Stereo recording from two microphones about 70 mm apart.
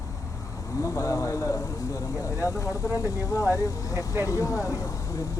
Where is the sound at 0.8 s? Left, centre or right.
Left.